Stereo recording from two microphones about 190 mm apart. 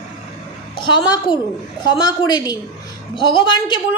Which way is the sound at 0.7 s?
25° left (ahead or behind).